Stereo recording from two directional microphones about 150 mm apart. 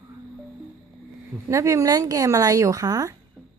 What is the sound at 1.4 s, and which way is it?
A woman's voice, 20° right (ahead or behind).